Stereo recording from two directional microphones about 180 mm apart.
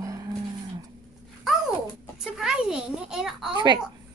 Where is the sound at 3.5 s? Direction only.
25° right (ahead or behind).